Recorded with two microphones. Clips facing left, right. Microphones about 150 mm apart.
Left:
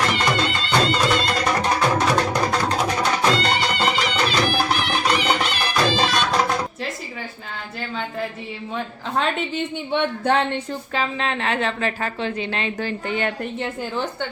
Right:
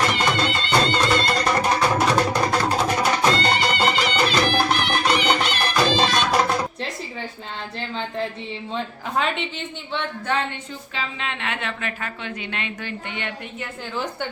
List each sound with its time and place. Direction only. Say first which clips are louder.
0.0 s music: even; centre (ahead or behind)
10.9 s a woman's voice: left 6 dB; 40° left (ahead or behind)